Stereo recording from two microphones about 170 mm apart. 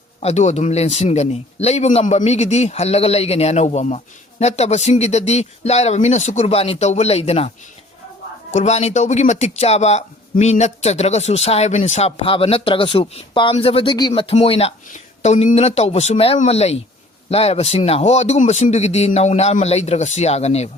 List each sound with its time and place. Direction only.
0.2 s speech: 40° left (ahead or behind)
8.5 s speech: 40° left (ahead or behind)
14.1 s speech: 40° left (ahead or behind)